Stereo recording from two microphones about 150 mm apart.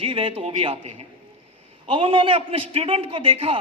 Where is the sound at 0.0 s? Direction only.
35° right (ahead or behind).